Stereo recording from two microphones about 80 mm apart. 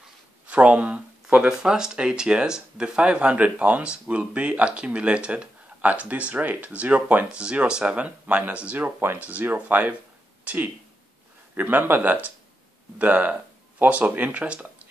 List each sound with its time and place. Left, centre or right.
0.5 s speech: centre